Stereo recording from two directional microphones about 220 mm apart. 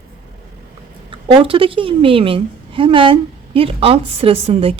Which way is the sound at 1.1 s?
25° right (ahead or behind).